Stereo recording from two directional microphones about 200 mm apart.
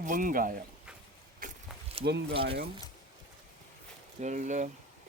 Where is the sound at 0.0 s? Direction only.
40° right (ahead or behind).